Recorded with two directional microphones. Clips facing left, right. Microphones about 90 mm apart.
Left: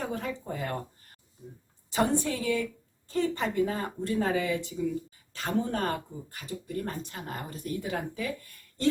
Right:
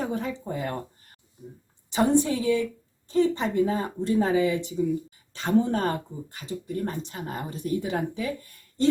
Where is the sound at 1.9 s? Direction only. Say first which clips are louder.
Right 5 dB; 20° right (ahead or behind).